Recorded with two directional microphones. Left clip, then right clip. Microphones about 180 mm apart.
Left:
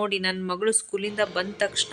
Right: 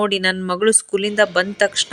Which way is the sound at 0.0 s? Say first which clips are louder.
Right 7 dB; 35° right (ahead or behind).